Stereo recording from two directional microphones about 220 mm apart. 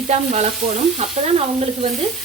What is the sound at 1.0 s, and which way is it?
Frying, 30° right (ahead or behind).